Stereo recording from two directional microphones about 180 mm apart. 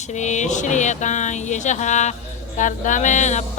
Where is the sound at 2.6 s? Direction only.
45° left (ahead or behind).